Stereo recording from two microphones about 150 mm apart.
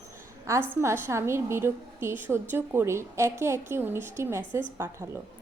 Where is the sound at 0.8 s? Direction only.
20° right (ahead or behind).